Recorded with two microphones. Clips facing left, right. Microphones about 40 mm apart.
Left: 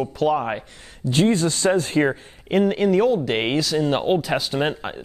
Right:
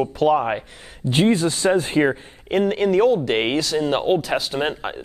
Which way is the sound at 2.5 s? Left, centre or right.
Centre.